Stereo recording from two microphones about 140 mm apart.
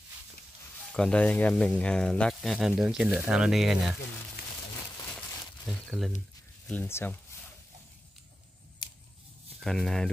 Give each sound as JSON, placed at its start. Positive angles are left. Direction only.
{"t": 0.9, "sound": "speech", "side_deg": 5}
{"t": 5.7, "sound": "speech", "side_deg": 0}
{"t": 6.7, "sound": "speech", "side_deg": 15}
{"t": 9.6, "sound": "speech", "side_deg": 5}